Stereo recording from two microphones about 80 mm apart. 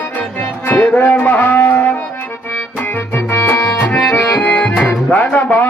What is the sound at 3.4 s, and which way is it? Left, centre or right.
Accordion, left.